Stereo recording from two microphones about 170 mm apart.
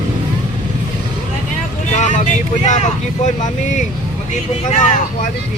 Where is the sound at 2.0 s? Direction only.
45° left (ahead or behind).